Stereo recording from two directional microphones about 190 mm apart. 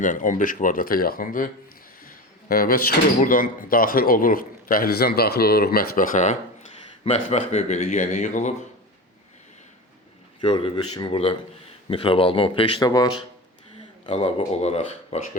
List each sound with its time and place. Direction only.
0.0 s speech: 45° left (ahead or behind)
2.5 s speech: 50° left (ahead or behind)
7.0 s speech: 30° left (ahead or behind)
10.4 s speech: 25° left (ahead or behind)